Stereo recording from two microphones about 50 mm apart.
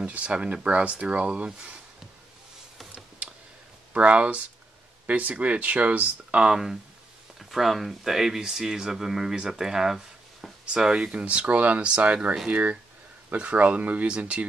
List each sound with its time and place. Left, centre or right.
0.0 s speech: right
3.9 s speech: right
6.4 s speech: centre